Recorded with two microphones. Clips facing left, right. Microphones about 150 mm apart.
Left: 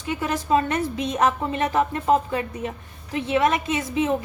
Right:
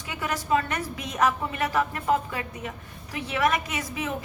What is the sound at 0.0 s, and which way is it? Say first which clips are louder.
A woman's voice: left 5 dB; 25° left (ahead or behind).